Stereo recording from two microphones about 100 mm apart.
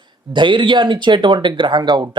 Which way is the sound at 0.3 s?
55° right (ahead or behind).